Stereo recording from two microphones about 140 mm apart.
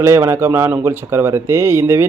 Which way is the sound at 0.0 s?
20° right (ahead or behind).